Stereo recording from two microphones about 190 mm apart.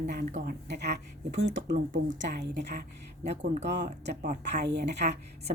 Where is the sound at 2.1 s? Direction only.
65° right (ahead or behind).